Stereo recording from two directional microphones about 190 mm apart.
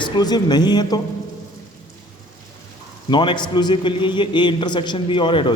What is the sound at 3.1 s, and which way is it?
A man's voice, 25° left (ahead or behind).